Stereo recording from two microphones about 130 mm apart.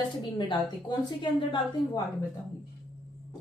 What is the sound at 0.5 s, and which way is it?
A woman's voice, 35° left (ahead or behind).